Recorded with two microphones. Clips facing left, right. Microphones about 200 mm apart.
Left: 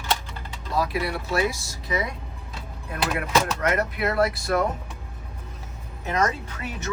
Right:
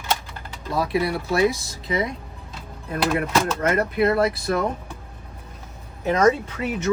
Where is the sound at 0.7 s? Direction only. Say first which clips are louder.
Right 3 dB; 25° right (ahead or behind).